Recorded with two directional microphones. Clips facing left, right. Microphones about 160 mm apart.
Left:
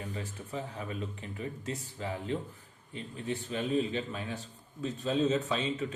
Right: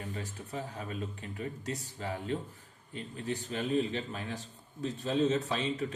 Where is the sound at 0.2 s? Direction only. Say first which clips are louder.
Left 1 dB; 40° right (ahead or behind).